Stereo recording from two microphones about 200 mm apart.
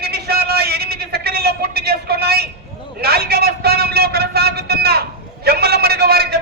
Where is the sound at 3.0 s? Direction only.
50° right (ahead or behind).